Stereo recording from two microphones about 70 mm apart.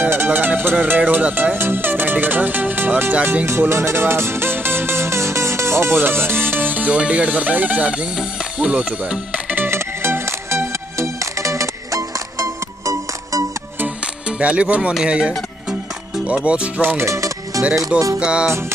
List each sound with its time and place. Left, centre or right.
0.0 s speech: right
3.4 s music: right
9.7 s music: right
14.4 s speech: centre
16.4 s speech: centre
16.8 s music: right
18.2 s speech: centre